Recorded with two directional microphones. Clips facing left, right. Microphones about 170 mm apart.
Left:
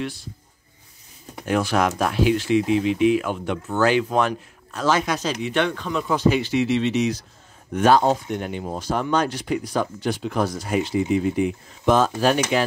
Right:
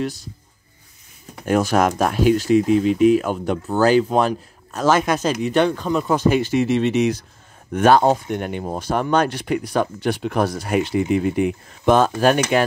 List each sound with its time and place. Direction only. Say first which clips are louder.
0.0 s speech: right 4 dB; 40° right (ahead or behind)
1.4 s speech: right 3 dB; 45° right (ahead or behind)